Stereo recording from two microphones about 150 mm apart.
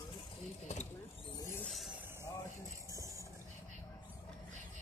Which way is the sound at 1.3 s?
15° left (ahead or behind).